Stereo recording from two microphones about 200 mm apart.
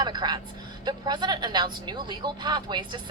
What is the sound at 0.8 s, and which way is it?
A woman's voice, 20° right (ahead or behind).